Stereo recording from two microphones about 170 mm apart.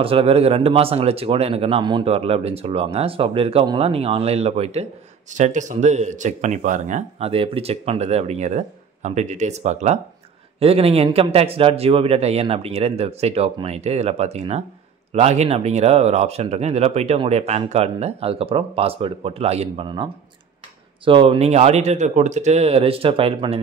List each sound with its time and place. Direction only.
0.0 s speech: 35° right (ahead or behind)